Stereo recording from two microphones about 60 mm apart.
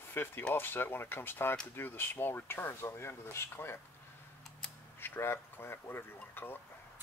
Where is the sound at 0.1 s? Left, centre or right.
Left.